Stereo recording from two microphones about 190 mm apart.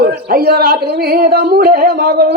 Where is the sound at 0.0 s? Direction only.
55° right (ahead or behind).